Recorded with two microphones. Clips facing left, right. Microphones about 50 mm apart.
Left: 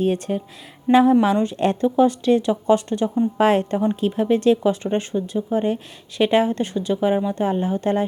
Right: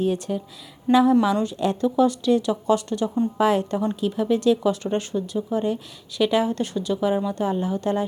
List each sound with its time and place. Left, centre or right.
0.0 s speech: left